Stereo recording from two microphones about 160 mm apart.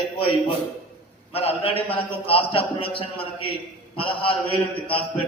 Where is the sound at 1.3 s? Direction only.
40° left (ahead or behind).